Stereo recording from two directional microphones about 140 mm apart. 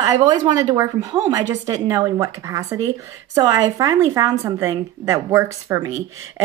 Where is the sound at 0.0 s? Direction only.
30° right (ahead or behind).